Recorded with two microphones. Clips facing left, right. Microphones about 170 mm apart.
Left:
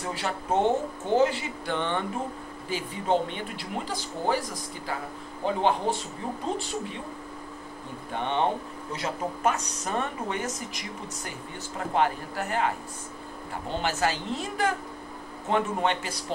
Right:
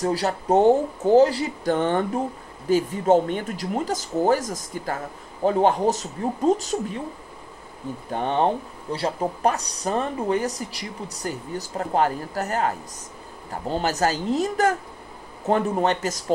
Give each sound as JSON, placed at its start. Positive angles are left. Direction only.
{"t": 0.0, "sound": "speech", "side_deg": -40}
{"t": 8.1, "sound": "speech", "side_deg": -40}